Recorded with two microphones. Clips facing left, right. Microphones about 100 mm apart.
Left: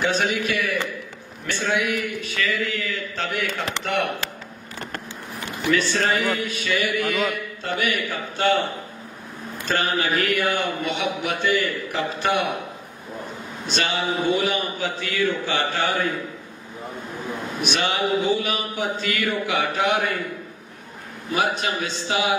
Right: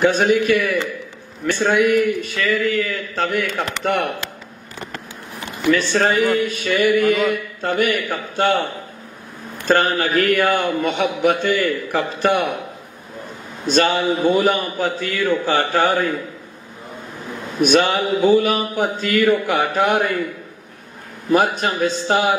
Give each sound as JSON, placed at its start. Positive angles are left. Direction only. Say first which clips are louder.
{"t": 0.0, "sound": "a man's voice", "louder": "right 7 dB", "side_deg": -50}
{"t": 5.7, "sound": "a man's voice", "louder": "right 5 dB", "side_deg": -40}
{"t": 9.7, "sound": "a man's voice", "louder": "right 6 dB", "side_deg": -50}
{"t": 13.7, "sound": "a man's voice", "louder": "right 8 dB", "side_deg": -45}
{"t": 17.6, "sound": "a man's voice", "louder": "right 9 dB", "side_deg": -45}
{"t": 21.3, "sound": "a man's voice", "louder": "right 6 dB", "side_deg": -50}